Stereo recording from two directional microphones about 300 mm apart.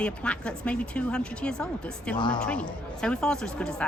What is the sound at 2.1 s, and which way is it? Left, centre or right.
Speech, centre.